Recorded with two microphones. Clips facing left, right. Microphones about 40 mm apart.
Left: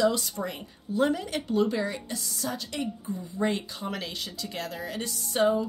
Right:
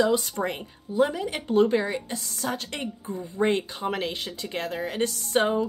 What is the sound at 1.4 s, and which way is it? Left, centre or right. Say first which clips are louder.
Speech: right 6 dB; right.